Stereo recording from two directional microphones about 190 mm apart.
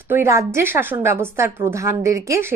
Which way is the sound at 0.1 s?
15° right (ahead or behind).